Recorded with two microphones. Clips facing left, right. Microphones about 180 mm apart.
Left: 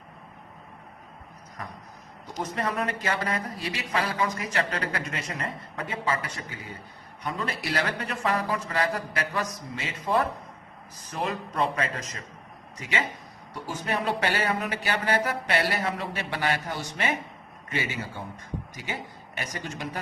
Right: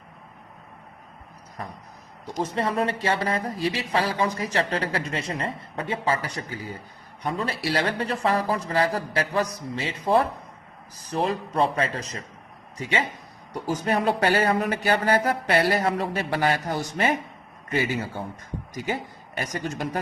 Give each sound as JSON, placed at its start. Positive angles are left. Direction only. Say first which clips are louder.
{"t": 2.4, "sound": "speech", "louder": "right 4 dB", "side_deg": -30}
{"t": 18.7, "sound": "speech", "louder": "right 7 dB", "side_deg": -40}